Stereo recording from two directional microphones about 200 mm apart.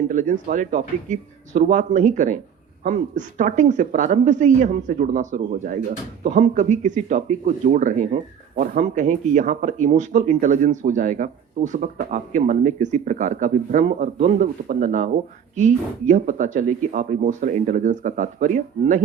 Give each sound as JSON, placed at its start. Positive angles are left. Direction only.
{"t": 0.1, "sound": "speech", "side_deg": -40}